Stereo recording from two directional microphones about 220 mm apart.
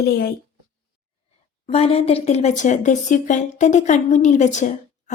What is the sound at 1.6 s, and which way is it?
A woman's voice, 25° left (ahead or behind).